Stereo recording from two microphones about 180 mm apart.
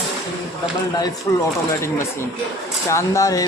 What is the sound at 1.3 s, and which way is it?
Speech, 15° left (ahead or behind).